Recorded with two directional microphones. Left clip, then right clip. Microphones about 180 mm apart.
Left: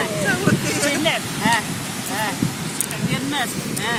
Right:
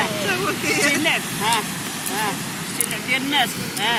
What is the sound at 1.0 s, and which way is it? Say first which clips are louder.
Vehicle: even; 20° left (ahead or behind).